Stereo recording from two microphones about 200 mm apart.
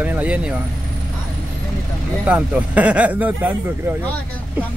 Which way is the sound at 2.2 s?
5° right (ahead or behind).